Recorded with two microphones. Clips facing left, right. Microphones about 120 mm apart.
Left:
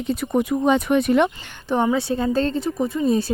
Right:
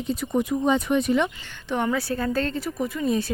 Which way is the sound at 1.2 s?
30° left (ahead or behind).